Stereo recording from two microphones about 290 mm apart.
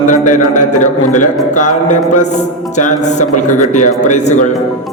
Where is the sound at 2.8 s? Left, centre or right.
Left.